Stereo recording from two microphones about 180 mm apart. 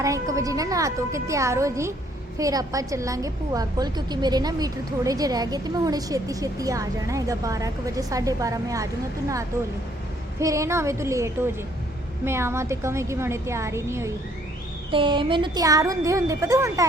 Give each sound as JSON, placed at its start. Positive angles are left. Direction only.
{"t": 0.0, "sound": "a woman's voice", "side_deg": -20}
{"t": 10.4, "sound": "a woman's voice", "side_deg": -15}
{"t": 14.8, "sound": "a woman's voice", "side_deg": -30}